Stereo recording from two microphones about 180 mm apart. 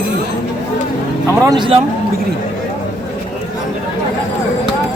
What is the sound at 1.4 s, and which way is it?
Speech, 25° right (ahead or behind).